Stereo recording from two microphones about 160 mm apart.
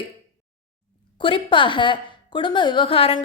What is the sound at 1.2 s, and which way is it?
A woman's voice, 30° left (ahead or behind).